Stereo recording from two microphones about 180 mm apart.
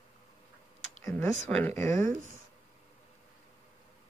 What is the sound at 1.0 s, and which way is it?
Speech, 15° left (ahead or behind).